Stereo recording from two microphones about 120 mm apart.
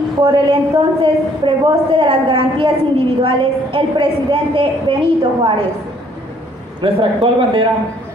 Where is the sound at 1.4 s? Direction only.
45° right (ahead or behind).